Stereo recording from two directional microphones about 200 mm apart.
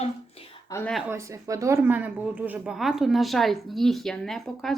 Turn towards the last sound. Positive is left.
turn(degrees=0)  # may be behind; listen again after turning